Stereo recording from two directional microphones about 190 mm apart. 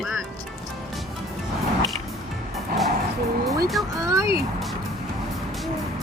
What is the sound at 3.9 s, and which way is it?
Speech, 15° right (ahead or behind).